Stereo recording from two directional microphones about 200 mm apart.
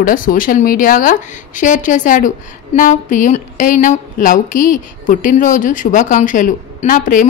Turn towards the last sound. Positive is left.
turn(degrees=40)  # may be behind; listen again after turning